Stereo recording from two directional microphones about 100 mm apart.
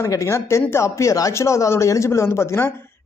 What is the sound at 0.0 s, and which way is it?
Speech, 30° left (ahead or behind).